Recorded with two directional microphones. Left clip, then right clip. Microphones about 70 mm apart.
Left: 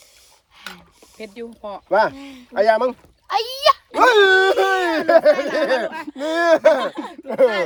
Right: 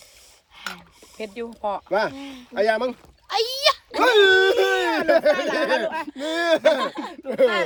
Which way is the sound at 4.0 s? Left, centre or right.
Left.